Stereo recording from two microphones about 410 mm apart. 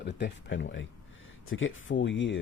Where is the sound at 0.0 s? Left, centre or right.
Left.